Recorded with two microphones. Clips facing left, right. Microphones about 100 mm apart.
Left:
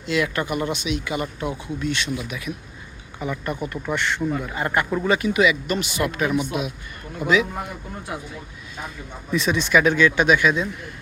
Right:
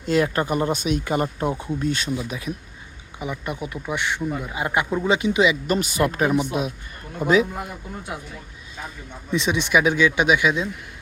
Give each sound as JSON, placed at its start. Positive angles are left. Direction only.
{"t": 0.0, "sound": "speech", "side_deg": -40}
{"t": 3.2, "sound": "speech", "side_deg": -10}
{"t": 9.3, "sound": "speech", "side_deg": -20}